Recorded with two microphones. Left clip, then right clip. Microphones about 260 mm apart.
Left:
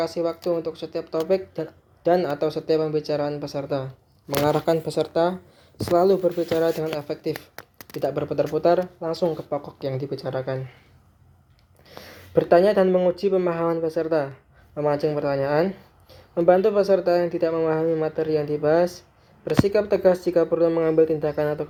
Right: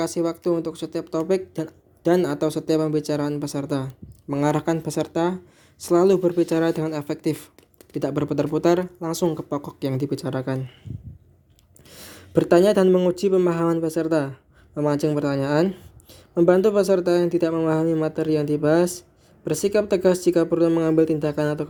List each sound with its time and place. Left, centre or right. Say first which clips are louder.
0.0 s speech: right 1 dB; right
11.9 s speech: left 1 dB; right